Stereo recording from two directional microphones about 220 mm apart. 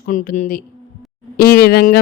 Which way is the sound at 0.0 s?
40° left (ahead or behind).